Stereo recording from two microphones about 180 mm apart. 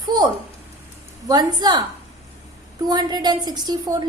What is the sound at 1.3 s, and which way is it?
Speech, 20° right (ahead or behind).